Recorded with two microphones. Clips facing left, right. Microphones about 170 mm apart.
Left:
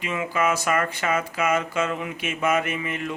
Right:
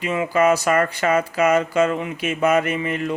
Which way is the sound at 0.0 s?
35° right (ahead or behind).